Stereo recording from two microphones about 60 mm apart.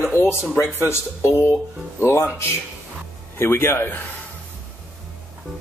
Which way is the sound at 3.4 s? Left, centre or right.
Left.